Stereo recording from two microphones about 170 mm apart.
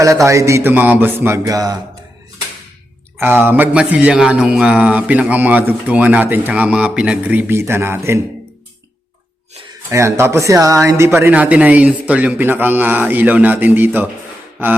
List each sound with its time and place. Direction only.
0.0 s mantra: 20° right (ahead or behind)
3.2 s mantra: 10° right (ahead or behind)
9.9 s mantra: 15° right (ahead or behind)